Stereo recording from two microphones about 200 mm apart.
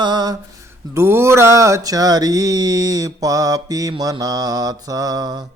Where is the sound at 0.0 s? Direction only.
20° right (ahead or behind).